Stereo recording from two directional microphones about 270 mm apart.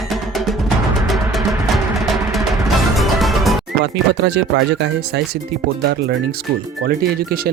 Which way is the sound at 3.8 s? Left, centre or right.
Right.